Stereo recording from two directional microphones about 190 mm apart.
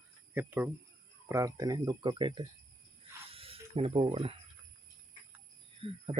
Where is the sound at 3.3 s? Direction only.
30° right (ahead or behind).